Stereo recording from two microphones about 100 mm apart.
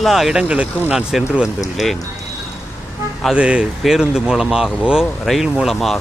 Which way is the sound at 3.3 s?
10° right (ahead or behind).